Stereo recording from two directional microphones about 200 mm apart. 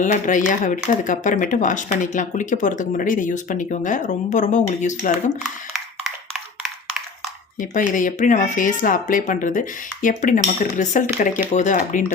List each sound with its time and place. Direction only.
0.0 s speech: 40° left (ahead or behind)
6.3 s a sound: 5° right (ahead or behind)
7.6 s speech: 40° left (ahead or behind)